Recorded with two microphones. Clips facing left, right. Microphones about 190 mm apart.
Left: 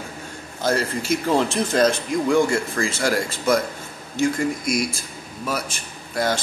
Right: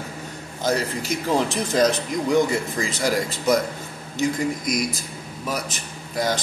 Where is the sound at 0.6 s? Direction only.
15° right (ahead or behind).